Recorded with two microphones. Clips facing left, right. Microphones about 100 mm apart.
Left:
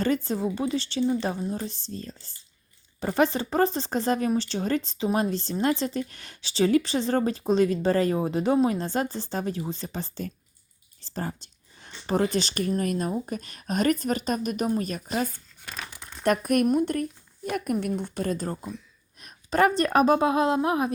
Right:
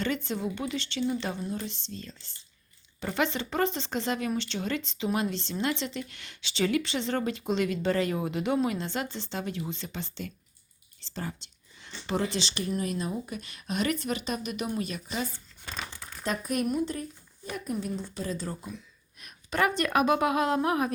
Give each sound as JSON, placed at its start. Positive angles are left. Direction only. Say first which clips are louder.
{"t": 0.0, "sound": "speech", "louder": "left 5 dB", "side_deg": 40}
{"t": 11.1, "sound": "whispering", "louder": "left 4 dB", "side_deg": 40}
{"t": 11.9, "sound": "speech", "louder": "left 5 dB", "side_deg": 40}
{"t": 15.9, "sound": "crumpling", "louder": "even", "side_deg": 20}
{"t": 16.2, "sound": "a woman's voice", "louder": "left 7 dB", "side_deg": 60}
{"t": 19.2, "sound": "speech", "louder": "left 5 dB", "side_deg": 40}